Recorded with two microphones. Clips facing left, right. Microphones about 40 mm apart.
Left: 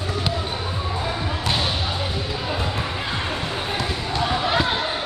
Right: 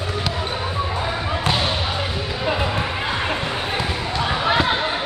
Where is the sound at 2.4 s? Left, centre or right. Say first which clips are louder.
Right 7 dB; right.